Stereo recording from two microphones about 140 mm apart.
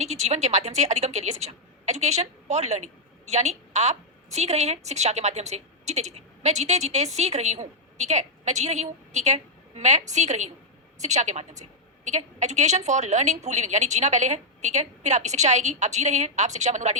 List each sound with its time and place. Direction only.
0.0 s a woman's voice: 50° right (ahead or behind)